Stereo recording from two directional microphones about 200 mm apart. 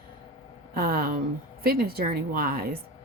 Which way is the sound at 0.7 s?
50° right (ahead or behind).